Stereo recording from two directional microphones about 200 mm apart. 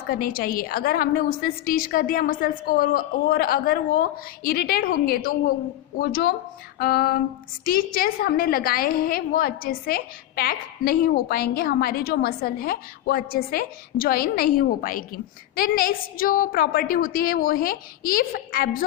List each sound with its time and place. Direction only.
0.1 s a woman's voice: 45° left (ahead or behind)